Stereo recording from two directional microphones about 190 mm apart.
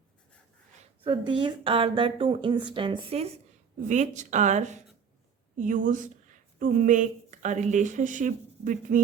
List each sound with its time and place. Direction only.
1.0 s a woman's voice: 25° right (ahead or behind)
3.8 s a woman's voice: 40° right (ahead or behind)